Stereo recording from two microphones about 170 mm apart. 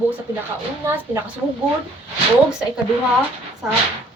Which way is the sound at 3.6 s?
5° right (ahead or behind).